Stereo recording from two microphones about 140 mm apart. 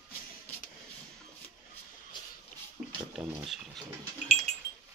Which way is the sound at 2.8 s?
5° right (ahead or behind).